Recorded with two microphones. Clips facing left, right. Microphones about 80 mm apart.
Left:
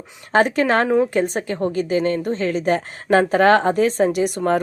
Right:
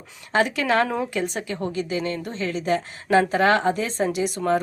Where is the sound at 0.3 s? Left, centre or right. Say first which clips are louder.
Left 4 dB; left.